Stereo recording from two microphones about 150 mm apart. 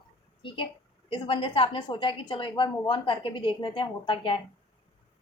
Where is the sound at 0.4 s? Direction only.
35° left (ahead or behind).